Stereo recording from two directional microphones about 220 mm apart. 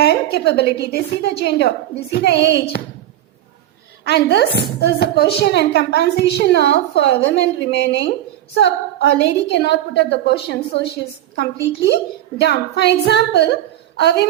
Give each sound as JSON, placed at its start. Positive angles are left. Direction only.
{"t": 0.0, "sound": "a woman's voice", "side_deg": 50}
{"t": 4.0, "sound": "a woman's voice", "side_deg": 50}